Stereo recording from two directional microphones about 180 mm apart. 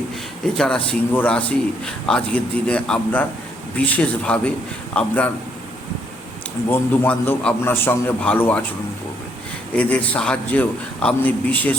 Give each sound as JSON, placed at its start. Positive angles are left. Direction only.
{"t": 0.5, "sound": "a man's voice", "side_deg": 5}
{"t": 6.7, "sound": "a man's voice", "side_deg": 10}
{"t": 9.7, "sound": "a man's voice", "side_deg": 10}